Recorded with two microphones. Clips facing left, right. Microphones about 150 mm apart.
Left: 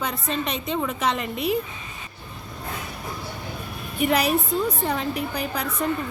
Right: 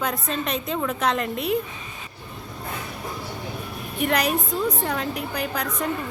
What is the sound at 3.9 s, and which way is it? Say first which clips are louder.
A woman's voice: left 2 dB; 5° left (ahead or behind).